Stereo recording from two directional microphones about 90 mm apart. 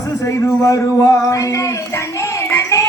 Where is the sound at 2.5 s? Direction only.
35° left (ahead or behind).